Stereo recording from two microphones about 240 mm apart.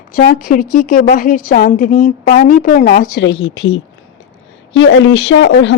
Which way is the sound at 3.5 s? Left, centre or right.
Left.